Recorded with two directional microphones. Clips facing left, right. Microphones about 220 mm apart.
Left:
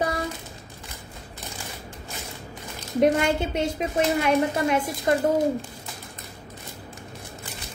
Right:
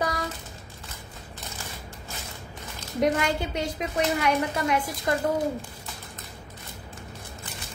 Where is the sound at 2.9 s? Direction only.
25° left (ahead or behind).